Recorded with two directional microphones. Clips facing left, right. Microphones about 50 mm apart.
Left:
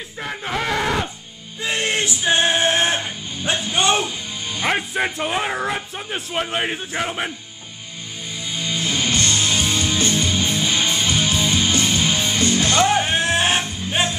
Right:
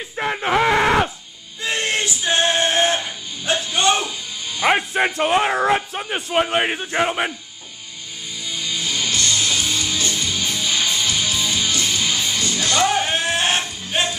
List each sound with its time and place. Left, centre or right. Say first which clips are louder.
0.2 s speech: right 7 dB; right
1.6 s music: even; centre
4.6 s a man's voice: right 4 dB; centre
8.5 s music: left 2 dB; left
12.8 s music: left 1 dB; centre